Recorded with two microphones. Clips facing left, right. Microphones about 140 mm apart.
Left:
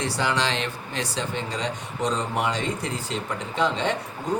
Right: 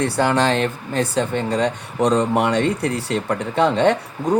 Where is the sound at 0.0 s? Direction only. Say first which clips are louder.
Right 7 dB; 50° right (ahead or behind).